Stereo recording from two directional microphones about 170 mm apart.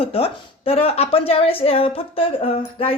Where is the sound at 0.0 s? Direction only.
35° left (ahead or behind).